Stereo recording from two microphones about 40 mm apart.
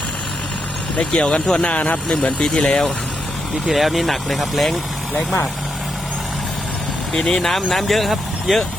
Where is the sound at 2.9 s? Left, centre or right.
Centre.